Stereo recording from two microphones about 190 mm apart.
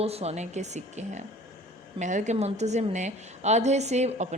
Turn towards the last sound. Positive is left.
turn(degrees=-35)  # may be behind; listen again after turning